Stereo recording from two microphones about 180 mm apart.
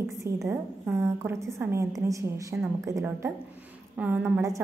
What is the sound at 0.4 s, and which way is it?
A woman's voice, 15° right (ahead or behind).